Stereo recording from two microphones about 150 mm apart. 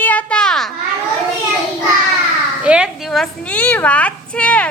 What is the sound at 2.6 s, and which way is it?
A woman's voice, 5° right (ahead or behind).